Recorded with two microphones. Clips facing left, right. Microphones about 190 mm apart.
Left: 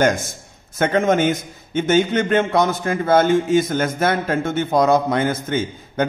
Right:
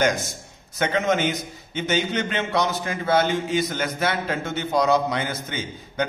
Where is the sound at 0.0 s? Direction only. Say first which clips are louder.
Left 4 dB; 50° left (ahead or behind).